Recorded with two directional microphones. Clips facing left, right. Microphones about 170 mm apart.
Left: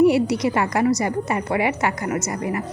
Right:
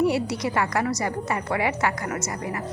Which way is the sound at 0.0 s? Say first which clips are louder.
Left 6 dB; 15° left (ahead or behind).